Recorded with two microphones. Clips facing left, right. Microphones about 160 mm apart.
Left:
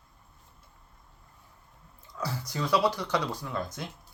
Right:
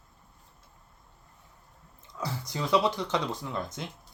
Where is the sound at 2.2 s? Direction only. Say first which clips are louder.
Left 1 dB; 20° right (ahead or behind).